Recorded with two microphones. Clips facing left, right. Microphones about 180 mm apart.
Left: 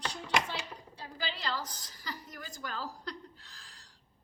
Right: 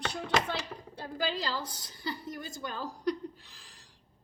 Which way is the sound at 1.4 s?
35° right (ahead or behind).